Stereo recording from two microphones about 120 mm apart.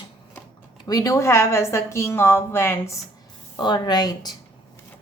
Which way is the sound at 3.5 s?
40° left (ahead or behind).